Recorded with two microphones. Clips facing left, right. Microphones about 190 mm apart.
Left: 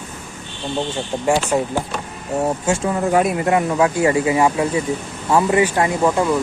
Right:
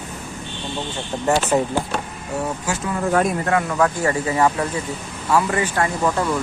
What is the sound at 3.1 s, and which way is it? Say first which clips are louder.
Speech: left 2 dB; 10° left (ahead or behind).